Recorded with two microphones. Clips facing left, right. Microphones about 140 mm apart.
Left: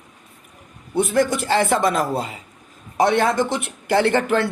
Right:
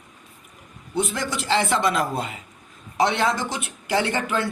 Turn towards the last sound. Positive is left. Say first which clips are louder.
# left 6 dB
turn(degrees=55)  # may be behind; listen again after turning